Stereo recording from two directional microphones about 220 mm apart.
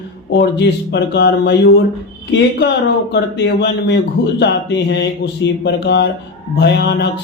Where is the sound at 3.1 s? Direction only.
50° left (ahead or behind).